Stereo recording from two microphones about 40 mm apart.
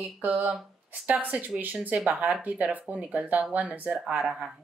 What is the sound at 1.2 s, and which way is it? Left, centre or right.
Speech, right.